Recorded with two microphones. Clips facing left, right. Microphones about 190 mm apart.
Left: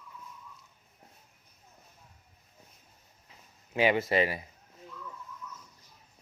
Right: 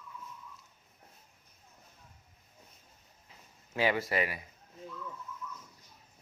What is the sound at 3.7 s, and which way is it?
Speech, 20° left (ahead or behind).